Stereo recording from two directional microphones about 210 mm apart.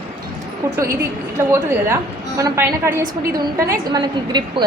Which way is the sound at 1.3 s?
15° right (ahead or behind).